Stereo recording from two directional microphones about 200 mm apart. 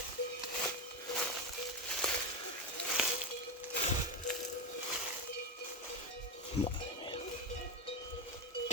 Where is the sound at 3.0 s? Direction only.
Centre (ahead or behind).